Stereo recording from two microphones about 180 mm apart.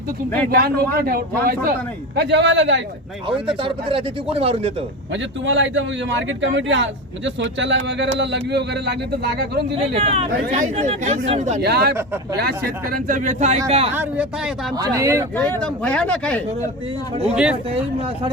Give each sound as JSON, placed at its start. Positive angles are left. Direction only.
{"t": 0.5, "sound": "speech", "side_deg": -55}
{"t": 2.1, "sound": "speech", "side_deg": -75}
{"t": 3.2, "sound": "speech", "side_deg": -30}
{"t": 5.1, "sound": "a man's voice", "side_deg": -90}
{"t": 9.9, "sound": "speech", "side_deg": -35}
{"t": 10.4, "sound": "speech", "side_deg": -45}
{"t": 11.6, "sound": "speech", "side_deg": -60}
{"t": 11.9, "sound": "speech", "side_deg": -15}
{"t": 12.4, "sound": "speech", "side_deg": -55}
{"t": 13.9, "sound": "speech", "side_deg": -10}
{"t": 15.6, "sound": "speech", "side_deg": 5}
{"t": 17.3, "sound": "speech", "side_deg": -5}